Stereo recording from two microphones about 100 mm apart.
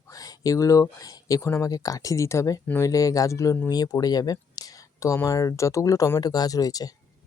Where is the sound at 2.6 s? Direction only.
20° left (ahead or behind).